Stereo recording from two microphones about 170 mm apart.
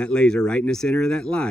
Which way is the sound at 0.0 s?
5° left (ahead or behind).